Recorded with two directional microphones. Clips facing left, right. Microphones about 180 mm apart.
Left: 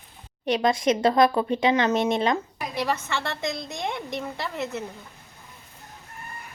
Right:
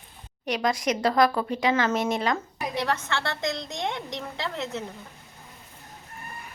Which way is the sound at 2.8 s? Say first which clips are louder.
Left 2 dB; 5° left (ahead or behind).